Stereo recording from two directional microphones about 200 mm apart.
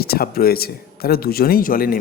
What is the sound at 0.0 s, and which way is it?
Speech, 50° left (ahead or behind).